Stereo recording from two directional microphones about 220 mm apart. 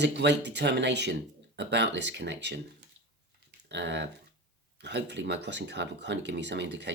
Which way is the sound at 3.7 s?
50° right (ahead or behind).